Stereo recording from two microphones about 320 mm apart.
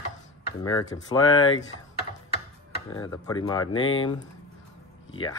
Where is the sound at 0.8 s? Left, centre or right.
Centre.